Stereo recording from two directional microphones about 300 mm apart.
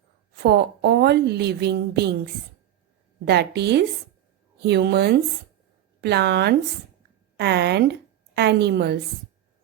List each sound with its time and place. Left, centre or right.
0.4 s a woman's voice: right
3.2 s a woman's voice: right